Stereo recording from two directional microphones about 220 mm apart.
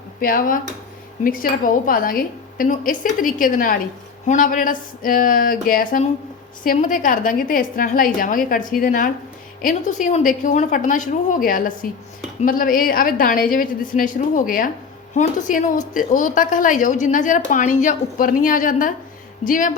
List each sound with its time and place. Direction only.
0.2 s a woman's voice: 40° left (ahead or behind)